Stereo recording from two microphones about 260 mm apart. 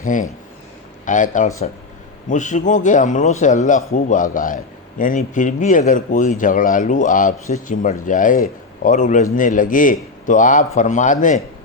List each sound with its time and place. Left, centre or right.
0.0 s a man's voice: left